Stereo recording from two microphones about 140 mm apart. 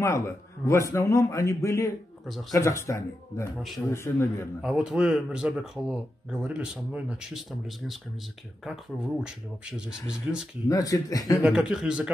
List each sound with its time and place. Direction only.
0.7 s a man's voice: 20° left (ahead or behind)
3.5 s speech: centre (ahead or behind)
3.9 s a man's voice: 20° left (ahead or behind)
4.6 s speech: 5° right (ahead or behind)
10.7 s a man's voice: 25° left (ahead or behind)
11.4 s speech: 5° right (ahead or behind)